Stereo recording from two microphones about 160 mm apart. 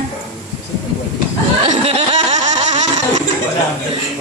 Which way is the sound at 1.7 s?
40° right (ahead or behind).